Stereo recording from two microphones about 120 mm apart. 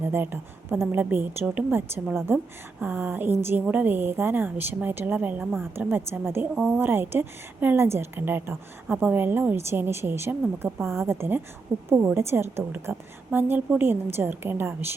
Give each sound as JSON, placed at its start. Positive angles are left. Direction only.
{"t": 0.0, "sound": "a woman's voice", "side_deg": -15}